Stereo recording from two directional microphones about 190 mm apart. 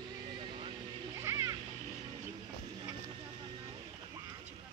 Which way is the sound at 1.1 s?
15° right (ahead or behind).